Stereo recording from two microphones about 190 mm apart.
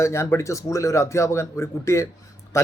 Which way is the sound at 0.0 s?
15° left (ahead or behind).